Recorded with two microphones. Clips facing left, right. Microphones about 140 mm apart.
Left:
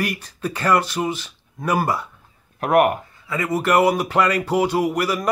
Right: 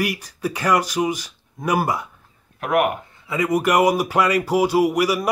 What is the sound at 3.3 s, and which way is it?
Speech, 15° right (ahead or behind).